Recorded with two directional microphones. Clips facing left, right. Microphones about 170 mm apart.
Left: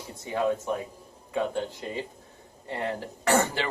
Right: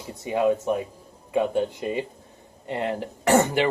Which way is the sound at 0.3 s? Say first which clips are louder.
Right 5 dB; 15° right (ahead or behind).